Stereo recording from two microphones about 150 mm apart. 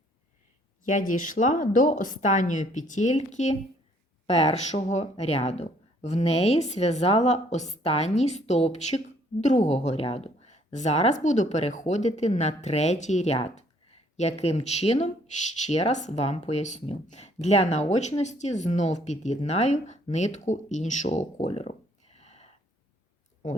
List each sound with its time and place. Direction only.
0.9 s a woman's voice: 60° left (ahead or behind)